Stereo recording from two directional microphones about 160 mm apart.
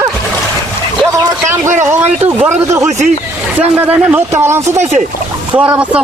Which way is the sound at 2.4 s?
15° right (ahead or behind).